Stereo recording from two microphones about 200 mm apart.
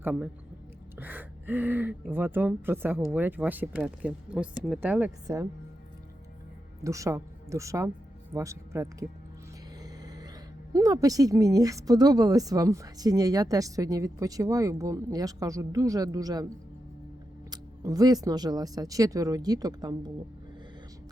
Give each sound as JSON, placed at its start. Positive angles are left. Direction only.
{"t": 0.0, "sound": "a woman's voice", "side_deg": -5}
{"t": 6.8, "sound": "a woman's voice", "side_deg": -15}
{"t": 9.8, "sound": "a sound", "side_deg": -20}
{"t": 10.7, "sound": "a woman's voice", "side_deg": -15}
{"t": 17.5, "sound": "speech", "side_deg": -20}